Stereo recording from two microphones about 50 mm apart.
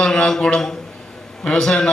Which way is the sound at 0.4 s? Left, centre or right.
Centre.